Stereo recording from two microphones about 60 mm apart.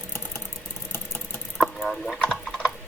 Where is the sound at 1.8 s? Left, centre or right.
Centre.